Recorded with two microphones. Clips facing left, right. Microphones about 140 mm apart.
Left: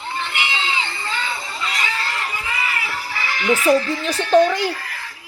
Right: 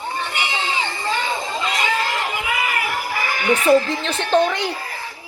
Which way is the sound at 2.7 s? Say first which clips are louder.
Right 4 dB; 45° right (ahead or behind).